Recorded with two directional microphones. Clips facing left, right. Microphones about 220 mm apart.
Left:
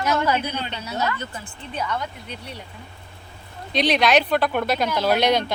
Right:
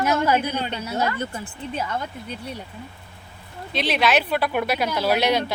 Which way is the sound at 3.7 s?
5° right (ahead or behind).